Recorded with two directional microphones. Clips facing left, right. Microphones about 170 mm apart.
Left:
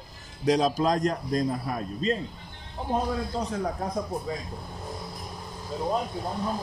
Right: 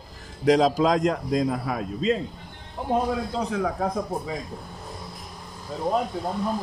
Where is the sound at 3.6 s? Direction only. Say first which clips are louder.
Right 4 dB; 90° right.